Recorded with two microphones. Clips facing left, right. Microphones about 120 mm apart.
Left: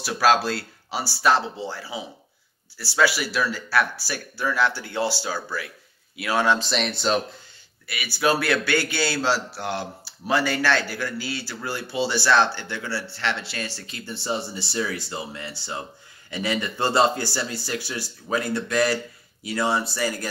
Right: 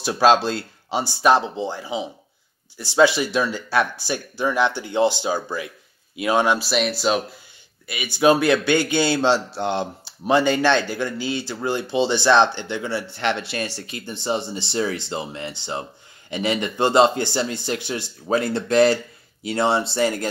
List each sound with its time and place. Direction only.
0.0 s speech: 25° right (ahead or behind); by 7.2 s 5° right (ahead or behind)
7.8 s speech: 20° right (ahead or behind)